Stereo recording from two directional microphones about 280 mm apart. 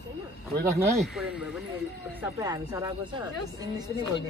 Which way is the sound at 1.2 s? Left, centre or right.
Centre.